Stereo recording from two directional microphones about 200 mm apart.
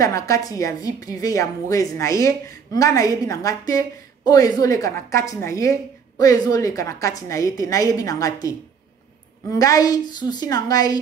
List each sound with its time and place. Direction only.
0.0 s a woman's voice: 15° left (ahead or behind)